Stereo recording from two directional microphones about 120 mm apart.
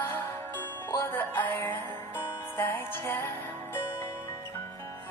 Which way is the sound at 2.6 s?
20° left (ahead or behind).